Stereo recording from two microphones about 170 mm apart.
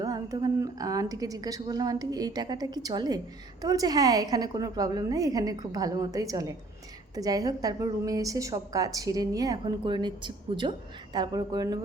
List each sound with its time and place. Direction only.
0.0 s a woman's voice: 20° right (ahead or behind)